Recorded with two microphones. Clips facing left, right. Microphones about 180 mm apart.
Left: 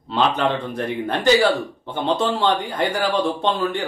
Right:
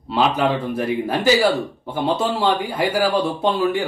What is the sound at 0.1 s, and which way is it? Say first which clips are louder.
Speech: right 1 dB; 5° right (ahead or behind).